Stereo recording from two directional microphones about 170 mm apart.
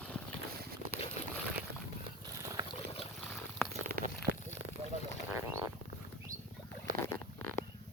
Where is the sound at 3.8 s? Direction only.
60° right (ahead or behind).